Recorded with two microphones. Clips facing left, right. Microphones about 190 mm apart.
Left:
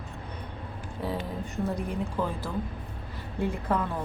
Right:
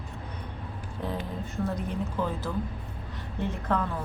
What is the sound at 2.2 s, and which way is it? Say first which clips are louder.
Speech: even; 10° left (ahead or behind).